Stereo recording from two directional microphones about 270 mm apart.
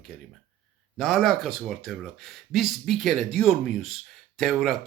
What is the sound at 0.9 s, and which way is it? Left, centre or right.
Speech, centre.